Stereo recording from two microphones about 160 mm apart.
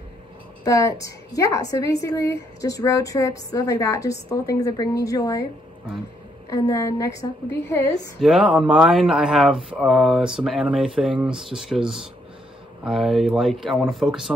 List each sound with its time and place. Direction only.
0.7 s a woman's voice: 20° left (ahead or behind)
6.5 s a woman's voice: 20° left (ahead or behind)
8.2 s speech: 5° right (ahead or behind)